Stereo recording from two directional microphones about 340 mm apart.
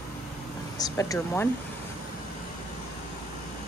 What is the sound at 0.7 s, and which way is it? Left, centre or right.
Speech, centre.